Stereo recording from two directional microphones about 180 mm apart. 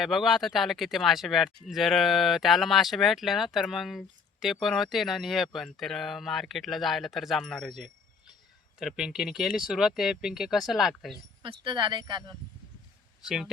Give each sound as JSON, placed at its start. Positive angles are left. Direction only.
{"t": 0.0, "sound": "speech", "side_deg": 0}
{"t": 11.4, "sound": "speech", "side_deg": -30}
{"t": 13.2, "sound": "speech", "side_deg": -5}